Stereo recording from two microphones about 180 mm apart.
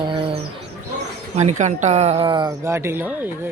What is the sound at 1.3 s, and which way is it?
Speech, 40° right (ahead or behind).